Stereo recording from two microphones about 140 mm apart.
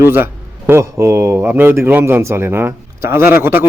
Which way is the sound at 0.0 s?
15° right (ahead or behind).